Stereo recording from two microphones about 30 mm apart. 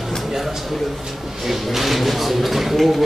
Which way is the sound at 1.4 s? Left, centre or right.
Centre.